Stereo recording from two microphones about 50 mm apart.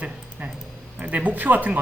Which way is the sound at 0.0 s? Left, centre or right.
Right.